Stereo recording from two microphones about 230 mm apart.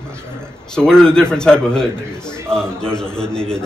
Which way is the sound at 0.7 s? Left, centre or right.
Centre.